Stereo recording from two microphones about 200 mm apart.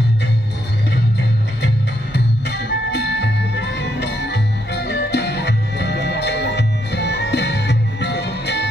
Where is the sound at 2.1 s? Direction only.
55° left (ahead or behind).